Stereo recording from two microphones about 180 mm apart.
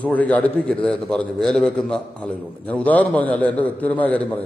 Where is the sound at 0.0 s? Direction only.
10° left (ahead or behind).